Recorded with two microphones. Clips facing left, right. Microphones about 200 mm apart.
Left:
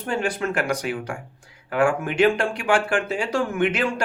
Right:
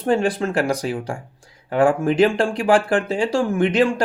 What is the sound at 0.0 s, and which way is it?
Speech, 35° right (ahead or behind).